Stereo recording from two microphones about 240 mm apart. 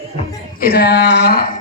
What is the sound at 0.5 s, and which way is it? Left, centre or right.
Speech, left.